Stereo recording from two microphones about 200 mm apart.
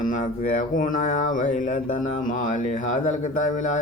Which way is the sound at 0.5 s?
40° left (ahead or behind).